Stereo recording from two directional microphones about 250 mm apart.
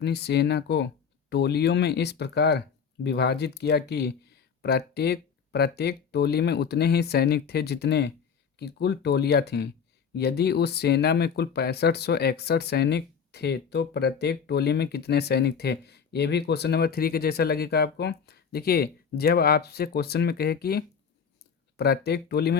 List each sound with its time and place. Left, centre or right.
0.0 s speech: left